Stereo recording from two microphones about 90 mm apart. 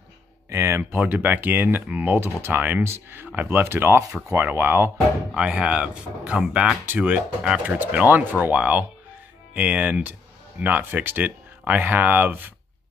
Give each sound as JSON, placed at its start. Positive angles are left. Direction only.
{"t": 0.5, "sound": "a sound", "side_deg": -30}
{"t": 0.9, "sound": "speech", "side_deg": -20}
{"t": 5.3, "sound": "speech", "side_deg": -15}